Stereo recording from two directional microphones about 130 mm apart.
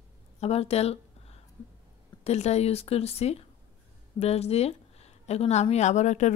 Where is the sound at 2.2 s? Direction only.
55° left (ahead or behind).